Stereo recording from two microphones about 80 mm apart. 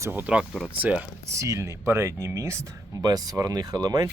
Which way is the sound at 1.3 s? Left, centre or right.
Right.